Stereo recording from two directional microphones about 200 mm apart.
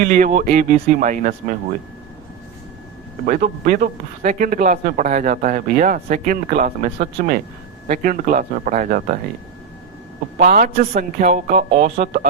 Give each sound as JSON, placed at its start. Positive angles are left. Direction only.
{"t": 0.0, "sound": "speech", "side_deg": -40}
{"t": 3.2, "sound": "speech", "side_deg": -40}
{"t": 10.3, "sound": "speech", "side_deg": -45}